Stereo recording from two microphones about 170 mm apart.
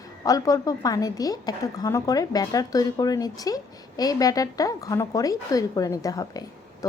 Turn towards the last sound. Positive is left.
turn(degrees=20)  # may be behind; listen again after turning